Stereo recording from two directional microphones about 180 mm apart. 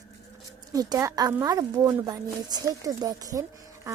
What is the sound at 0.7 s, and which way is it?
Speech, 20° right (ahead or behind).